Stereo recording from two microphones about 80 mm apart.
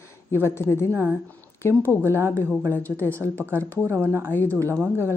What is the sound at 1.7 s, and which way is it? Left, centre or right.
Speech, left.